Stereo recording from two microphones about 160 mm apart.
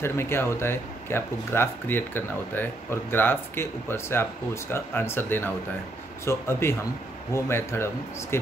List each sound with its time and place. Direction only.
0.0 s speech: 15° left (ahead or behind)